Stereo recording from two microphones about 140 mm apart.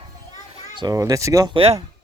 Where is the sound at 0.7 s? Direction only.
25° right (ahead or behind).